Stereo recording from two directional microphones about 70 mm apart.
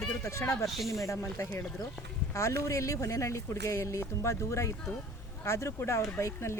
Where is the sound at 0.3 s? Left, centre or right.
Left.